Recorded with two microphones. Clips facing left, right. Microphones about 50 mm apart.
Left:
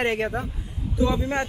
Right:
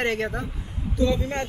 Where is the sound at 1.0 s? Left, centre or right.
Centre.